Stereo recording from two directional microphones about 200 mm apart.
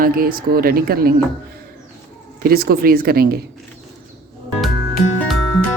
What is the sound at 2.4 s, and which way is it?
Speech, 50° right (ahead or behind).